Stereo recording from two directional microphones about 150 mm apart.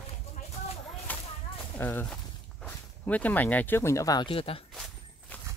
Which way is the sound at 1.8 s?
15° left (ahead or behind).